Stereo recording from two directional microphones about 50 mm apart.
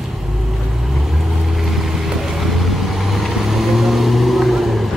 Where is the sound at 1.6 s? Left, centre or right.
Centre.